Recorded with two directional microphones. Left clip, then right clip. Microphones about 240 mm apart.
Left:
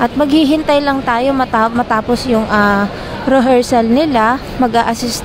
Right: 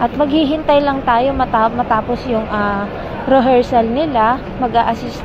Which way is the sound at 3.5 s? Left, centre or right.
Left.